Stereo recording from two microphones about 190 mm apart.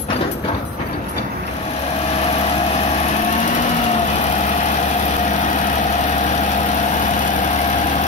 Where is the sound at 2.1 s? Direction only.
35° left (ahead or behind).